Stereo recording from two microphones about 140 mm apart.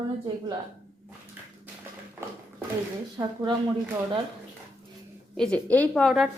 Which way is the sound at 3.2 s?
15° right (ahead or behind).